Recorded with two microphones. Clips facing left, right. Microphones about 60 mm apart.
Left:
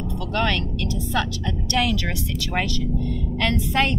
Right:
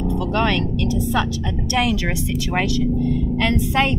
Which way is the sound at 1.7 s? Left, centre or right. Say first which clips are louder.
Right 3 dB; centre.